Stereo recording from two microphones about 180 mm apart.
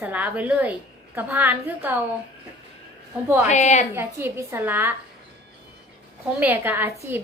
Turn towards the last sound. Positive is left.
turn(degrees=-10)  # may be behind; listen again after turning